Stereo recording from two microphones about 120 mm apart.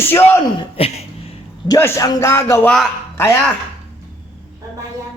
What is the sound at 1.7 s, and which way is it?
A man's voice, 25° left (ahead or behind).